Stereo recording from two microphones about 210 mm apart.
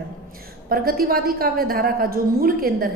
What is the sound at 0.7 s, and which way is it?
A woman's voice, 45° right (ahead or behind).